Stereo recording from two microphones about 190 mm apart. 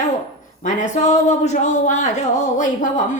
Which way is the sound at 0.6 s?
40° left (ahead or behind).